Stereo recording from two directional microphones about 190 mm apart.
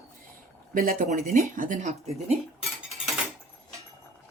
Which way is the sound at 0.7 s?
45° right (ahead or behind).